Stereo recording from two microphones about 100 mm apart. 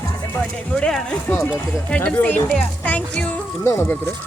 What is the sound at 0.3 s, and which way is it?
Speech, 10° left (ahead or behind).